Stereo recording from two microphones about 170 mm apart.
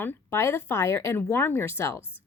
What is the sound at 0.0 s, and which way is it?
A woman's voice, 15° left (ahead or behind).